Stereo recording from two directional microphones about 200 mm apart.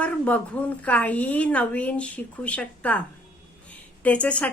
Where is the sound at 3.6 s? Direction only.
5° left (ahead or behind).